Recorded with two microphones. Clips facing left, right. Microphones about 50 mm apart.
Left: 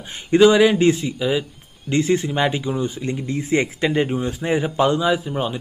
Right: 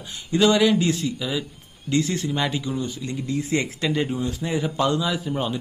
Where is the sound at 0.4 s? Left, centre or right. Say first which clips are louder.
Left 5 dB; centre.